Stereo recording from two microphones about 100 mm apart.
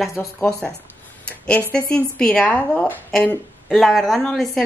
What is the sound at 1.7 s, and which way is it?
A woman's voice, 10° left (ahead or behind).